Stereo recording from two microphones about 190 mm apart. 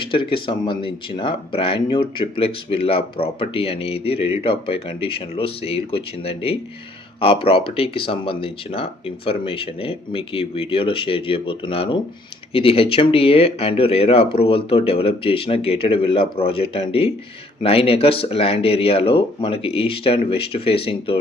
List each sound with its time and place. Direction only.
0.0 s speech: 25° left (ahead or behind)